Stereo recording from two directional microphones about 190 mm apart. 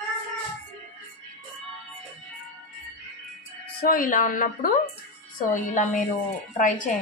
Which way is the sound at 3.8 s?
45° left (ahead or behind).